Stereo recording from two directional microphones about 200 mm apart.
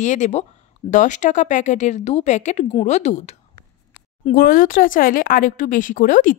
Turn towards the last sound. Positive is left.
turn(degrees=40)  # may be behind; listen again after turning